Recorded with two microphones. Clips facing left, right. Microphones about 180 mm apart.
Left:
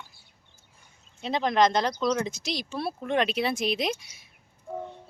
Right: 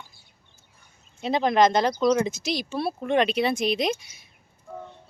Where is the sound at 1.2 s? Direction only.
5° right (ahead or behind).